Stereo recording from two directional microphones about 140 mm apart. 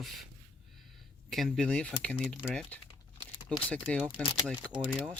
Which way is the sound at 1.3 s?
Centre (ahead or behind).